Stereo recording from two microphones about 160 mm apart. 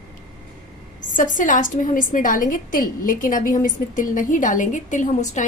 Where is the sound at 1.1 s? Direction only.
55° left (ahead or behind).